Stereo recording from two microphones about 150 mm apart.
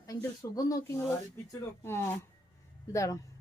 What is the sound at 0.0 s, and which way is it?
Speech, 20° left (ahead or behind).